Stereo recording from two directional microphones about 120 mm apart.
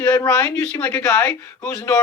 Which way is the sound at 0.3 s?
10° left (ahead or behind).